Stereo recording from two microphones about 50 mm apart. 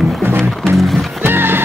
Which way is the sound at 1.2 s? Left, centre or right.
Right.